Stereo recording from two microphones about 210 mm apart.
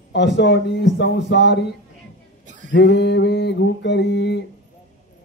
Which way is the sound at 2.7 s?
55° left (ahead or behind).